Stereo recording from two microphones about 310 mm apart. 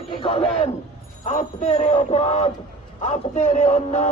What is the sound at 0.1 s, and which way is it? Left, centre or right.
A man's voice, centre.